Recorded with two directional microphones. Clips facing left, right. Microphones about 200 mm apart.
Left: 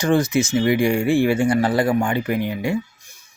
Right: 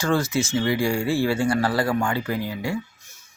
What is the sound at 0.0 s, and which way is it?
Speech, 20° left (ahead or behind).